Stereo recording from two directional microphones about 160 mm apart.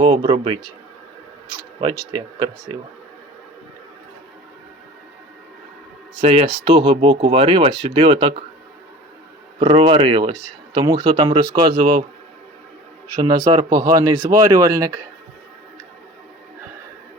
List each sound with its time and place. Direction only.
0.0 s speech: 30° right (ahead or behind)
6.1 s speech: 35° right (ahead or behind)
9.6 s speech: 35° right (ahead or behind)
13.1 s speech: 25° right (ahead or behind)